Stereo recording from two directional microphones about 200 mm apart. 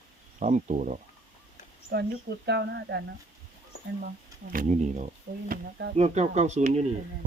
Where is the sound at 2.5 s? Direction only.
55° right (ahead or behind).